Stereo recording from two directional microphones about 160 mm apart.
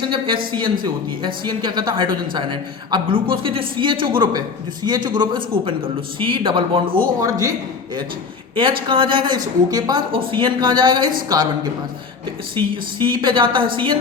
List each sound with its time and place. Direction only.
0.1 s a woman's voice: 30° right (ahead or behind)
7.2 s a woman's voice: 20° right (ahead or behind)
8.5 s a woman's voice: 30° right (ahead or behind)